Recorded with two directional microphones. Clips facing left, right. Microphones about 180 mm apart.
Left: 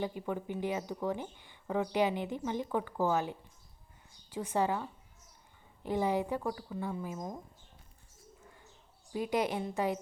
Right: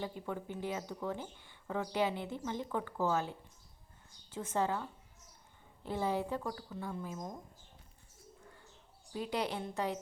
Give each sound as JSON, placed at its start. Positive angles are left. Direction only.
{"t": 0.0, "sound": "speech", "side_deg": 15}
{"t": 9.1, "sound": "speech", "side_deg": 10}